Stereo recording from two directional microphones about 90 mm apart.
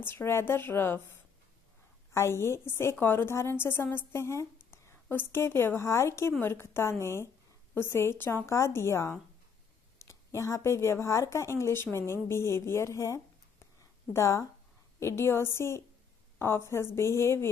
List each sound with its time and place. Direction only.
0.0 s a woman's voice: 25° left (ahead or behind)
2.1 s a woman's voice: 30° left (ahead or behind)